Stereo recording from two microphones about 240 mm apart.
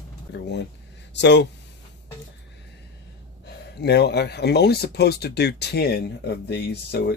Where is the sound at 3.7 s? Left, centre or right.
Left.